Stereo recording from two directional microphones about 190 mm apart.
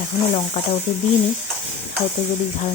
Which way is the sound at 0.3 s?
30° left (ahead or behind).